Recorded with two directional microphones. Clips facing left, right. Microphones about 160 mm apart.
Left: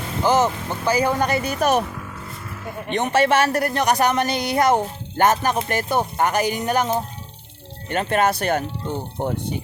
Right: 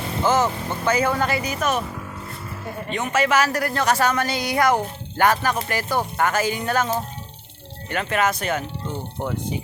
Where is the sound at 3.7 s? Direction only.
15° left (ahead or behind).